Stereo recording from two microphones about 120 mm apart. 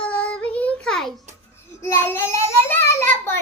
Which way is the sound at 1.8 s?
20° left (ahead or behind).